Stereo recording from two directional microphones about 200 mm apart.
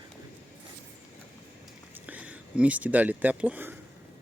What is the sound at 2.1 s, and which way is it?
Speech, 5° right (ahead or behind).